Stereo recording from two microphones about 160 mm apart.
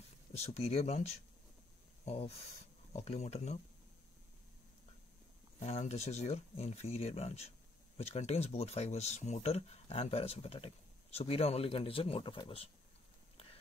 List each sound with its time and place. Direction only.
0.4 s speech: 40° left (ahead or behind)
5.6 s speech: 45° left (ahead or behind)